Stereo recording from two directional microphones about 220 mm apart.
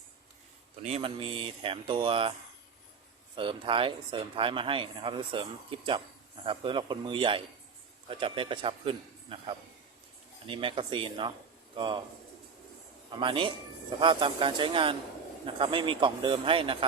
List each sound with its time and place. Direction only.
0.8 s speech: 30° right (ahead or behind)
3.3 s speech: 25° right (ahead or behind)
13.1 s a man's voice: 20° right (ahead or behind)